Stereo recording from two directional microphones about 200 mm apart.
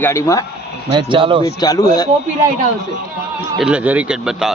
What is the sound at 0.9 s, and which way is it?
Speech, 25° right (ahead or behind).